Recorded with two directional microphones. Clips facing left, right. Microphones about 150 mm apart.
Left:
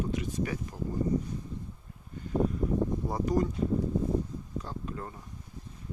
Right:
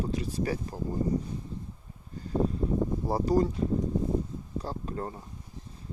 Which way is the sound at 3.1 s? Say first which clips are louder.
Right 5 dB; 30° right (ahead or behind).